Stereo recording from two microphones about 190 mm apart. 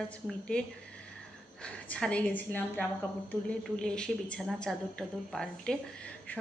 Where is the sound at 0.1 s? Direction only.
5° left (ahead or behind).